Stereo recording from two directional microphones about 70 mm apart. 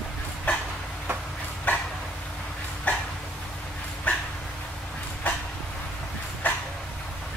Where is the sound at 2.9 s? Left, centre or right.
Left.